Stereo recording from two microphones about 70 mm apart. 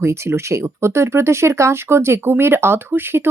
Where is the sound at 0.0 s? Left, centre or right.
Right.